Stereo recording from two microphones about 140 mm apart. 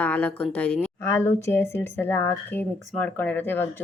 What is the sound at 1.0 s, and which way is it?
Speech, 20° left (ahead or behind).